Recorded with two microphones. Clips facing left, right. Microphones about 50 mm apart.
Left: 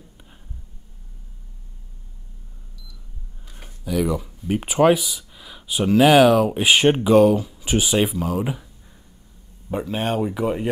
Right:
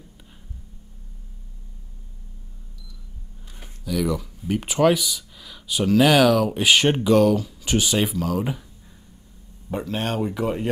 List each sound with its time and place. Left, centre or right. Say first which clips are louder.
3.6 s speech: left 2 dB; centre
9.7 s speech: left 2 dB; centre